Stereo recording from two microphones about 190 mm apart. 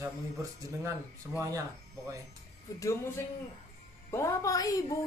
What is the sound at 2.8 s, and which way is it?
Speech, 15° left (ahead or behind).